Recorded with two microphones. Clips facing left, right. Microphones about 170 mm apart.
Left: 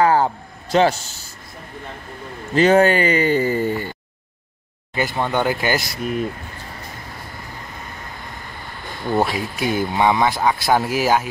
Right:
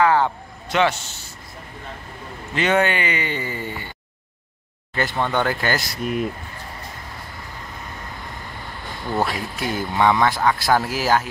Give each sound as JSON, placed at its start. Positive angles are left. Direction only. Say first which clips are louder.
{"t": 0.0, "sound": "a man's voice", "louder": "left 2 dB", "side_deg": 40}
{"t": 2.5, "sound": "speech", "louder": "left 6 dB", "side_deg": 35}
{"t": 4.9, "sound": "speech", "louder": "left 1 dB", "side_deg": 10}
{"t": 9.1, "sound": "speech", "louder": "left 3 dB", "side_deg": 15}